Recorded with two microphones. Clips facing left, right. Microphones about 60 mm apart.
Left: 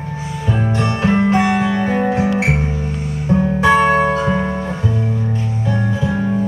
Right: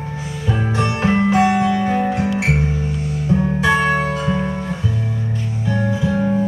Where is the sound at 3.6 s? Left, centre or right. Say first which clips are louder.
Left 7 dB; left.